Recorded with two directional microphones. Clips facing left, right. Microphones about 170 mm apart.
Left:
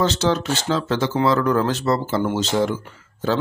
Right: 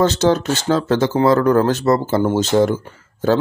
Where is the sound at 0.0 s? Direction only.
45° right (ahead or behind).